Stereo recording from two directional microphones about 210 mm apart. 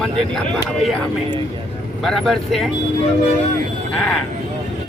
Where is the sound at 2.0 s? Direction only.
Centre (ahead or behind).